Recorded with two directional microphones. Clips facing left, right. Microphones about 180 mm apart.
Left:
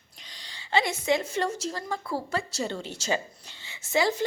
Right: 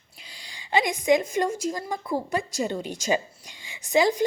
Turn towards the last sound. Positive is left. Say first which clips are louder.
# right 4 dB
turn(degrees=-15)  # may be behind; listen again after turning